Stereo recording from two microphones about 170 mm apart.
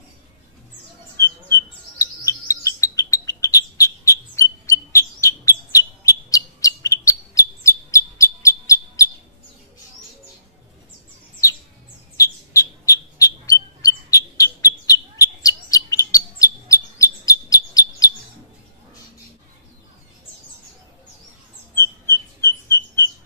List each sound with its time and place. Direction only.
1.2 s chirp: 20° left (ahead or behind)
12.2 s bird: 20° left (ahead or behind)
21.7 s rodents: 15° left (ahead or behind)